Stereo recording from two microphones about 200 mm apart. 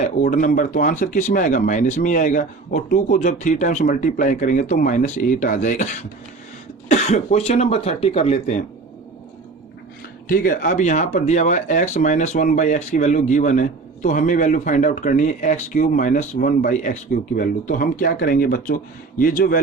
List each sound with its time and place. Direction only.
0.0 s speech: 40° left (ahead or behind)
10.2 s speech: 45° left (ahead or behind)